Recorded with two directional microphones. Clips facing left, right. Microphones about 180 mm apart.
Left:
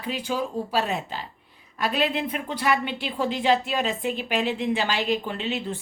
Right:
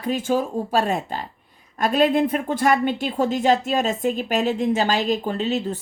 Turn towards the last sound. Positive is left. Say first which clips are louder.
# right 5 dB
turn(degrees=-40)  # may be behind; listen again after turning